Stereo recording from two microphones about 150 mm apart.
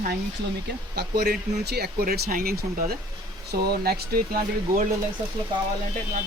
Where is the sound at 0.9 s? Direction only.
90° right.